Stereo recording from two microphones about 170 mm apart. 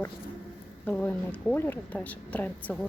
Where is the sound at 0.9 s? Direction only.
10° left (ahead or behind).